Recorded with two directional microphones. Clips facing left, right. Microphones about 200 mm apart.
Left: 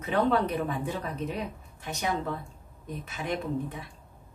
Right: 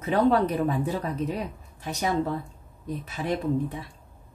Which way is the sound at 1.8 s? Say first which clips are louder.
Right 4 dB; 35° right (ahead or behind).